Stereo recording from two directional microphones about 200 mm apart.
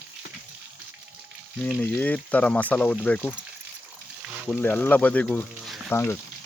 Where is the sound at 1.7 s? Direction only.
5° left (ahead or behind).